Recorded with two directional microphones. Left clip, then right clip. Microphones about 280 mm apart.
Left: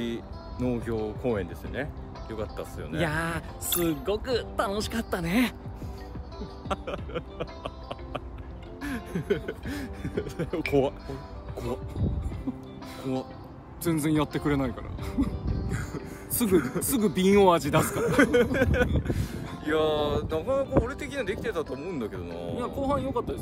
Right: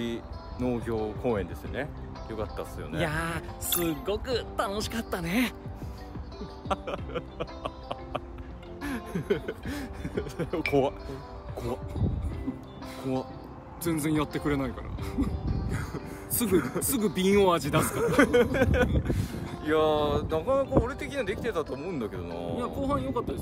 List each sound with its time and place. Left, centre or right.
0.0 s speech: centre
3.0 s speech: centre
3.7 s speech: centre
4.0 s speech: centre
6.4 s music: centre
8.8 s speech: centre
13.8 s speech: centre
15.4 s music: centre
16.4 s speech: centre
16.8 s speech: centre
17.8 s speech: centre
22.7 s speech: centre